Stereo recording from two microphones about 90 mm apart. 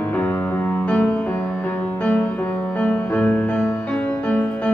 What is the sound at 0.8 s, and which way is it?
Music, 10° left (ahead or behind).